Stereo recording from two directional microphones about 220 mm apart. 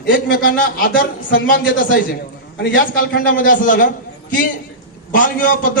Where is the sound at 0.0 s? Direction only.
40° left (ahead or behind).